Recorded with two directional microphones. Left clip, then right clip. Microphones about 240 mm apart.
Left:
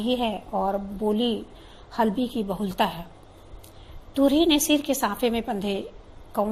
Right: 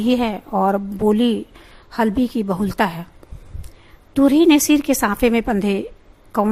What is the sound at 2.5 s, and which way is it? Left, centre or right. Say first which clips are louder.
Speech: right 3 dB; right.